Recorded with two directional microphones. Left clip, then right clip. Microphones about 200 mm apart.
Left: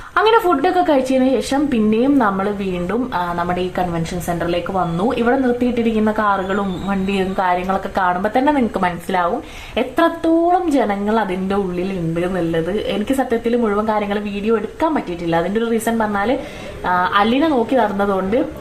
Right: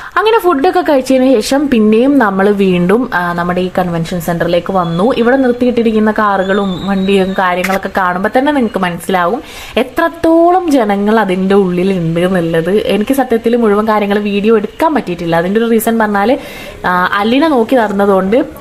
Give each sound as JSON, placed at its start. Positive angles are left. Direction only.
{"t": 0.2, "sound": "speech", "side_deg": -35}